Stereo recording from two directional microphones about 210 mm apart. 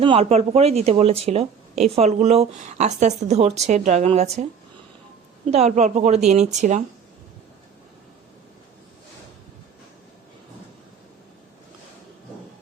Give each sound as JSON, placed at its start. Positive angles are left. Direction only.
{"t": 0.0, "sound": "speech", "side_deg": -25}
{"t": 5.5, "sound": "speech", "side_deg": -30}